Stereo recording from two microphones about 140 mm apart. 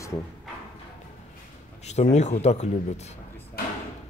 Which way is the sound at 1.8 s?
50° left (ahead or behind).